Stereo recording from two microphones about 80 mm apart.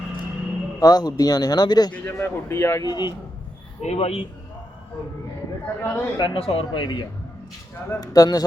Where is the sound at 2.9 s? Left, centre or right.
Left.